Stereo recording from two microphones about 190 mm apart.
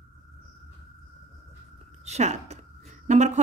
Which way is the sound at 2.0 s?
35° right (ahead or behind).